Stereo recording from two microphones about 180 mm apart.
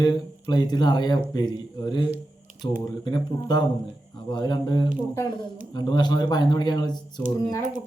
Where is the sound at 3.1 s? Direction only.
25° left (ahead or behind).